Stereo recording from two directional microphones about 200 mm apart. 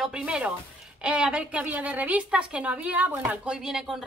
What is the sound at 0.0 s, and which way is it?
A woman's voice, 5° right (ahead or behind).